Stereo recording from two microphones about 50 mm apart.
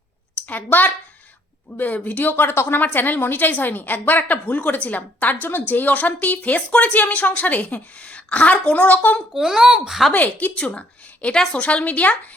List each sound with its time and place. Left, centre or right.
0.3 s a woman's voice: left
2.3 s a woman's voice: left
9.3 s speech: centre
10.1 s a woman's voice: left